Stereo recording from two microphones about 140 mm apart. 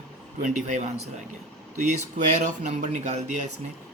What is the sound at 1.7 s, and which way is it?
Speech, 60° right (ahead or behind).